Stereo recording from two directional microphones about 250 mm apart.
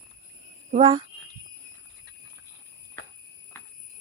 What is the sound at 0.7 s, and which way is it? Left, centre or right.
Speech, right.